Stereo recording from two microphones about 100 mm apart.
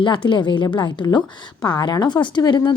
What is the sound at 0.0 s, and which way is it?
Speech, 55° left (ahead or behind).